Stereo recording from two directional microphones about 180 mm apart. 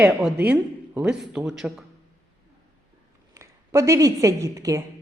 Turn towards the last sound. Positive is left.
turn(degrees=-15)  # may be behind; listen again after turning